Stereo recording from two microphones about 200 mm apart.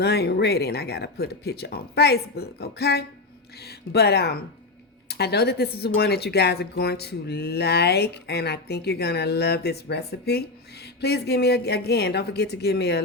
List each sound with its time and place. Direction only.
0.0 s speech: 55° left (ahead or behind)